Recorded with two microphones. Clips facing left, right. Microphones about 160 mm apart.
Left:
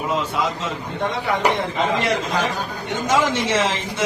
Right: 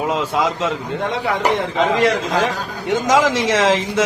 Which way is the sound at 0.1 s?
90° right.